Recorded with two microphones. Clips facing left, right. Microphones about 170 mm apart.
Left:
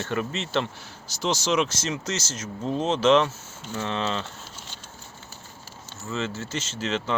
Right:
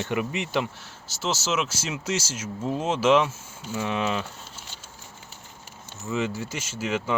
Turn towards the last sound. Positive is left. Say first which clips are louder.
# right 1 dB
turn(degrees=-10)  # may be behind; listen again after turning